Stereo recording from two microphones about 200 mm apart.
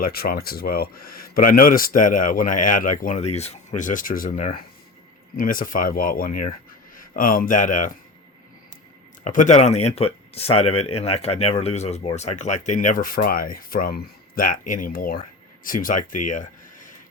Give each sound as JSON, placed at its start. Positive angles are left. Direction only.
{"t": 0.0, "sound": "speech", "side_deg": 50}
{"t": 9.2, "sound": "speech", "side_deg": 40}